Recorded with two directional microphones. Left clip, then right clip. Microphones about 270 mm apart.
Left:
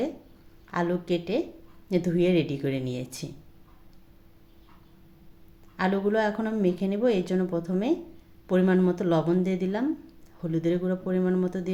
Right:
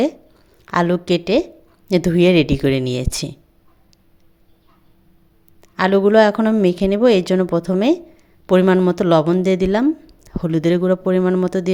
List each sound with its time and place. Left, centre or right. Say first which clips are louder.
0.6 s speech: right 11 dB; right
5.7 s speech: right 13 dB; right